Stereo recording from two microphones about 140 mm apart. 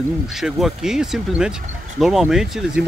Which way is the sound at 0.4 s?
Centre (ahead or behind).